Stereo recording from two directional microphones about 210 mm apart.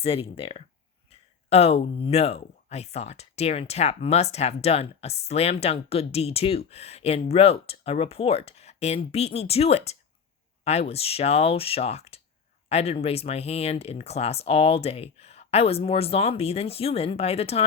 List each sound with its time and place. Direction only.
0.0 s speech: 25° left (ahead or behind)
1.1 s a sound: 30° left (ahead or behind)
2.0 s speech: 30° left (ahead or behind)